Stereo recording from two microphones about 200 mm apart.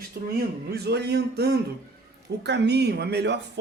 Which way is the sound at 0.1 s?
50° right (ahead or behind).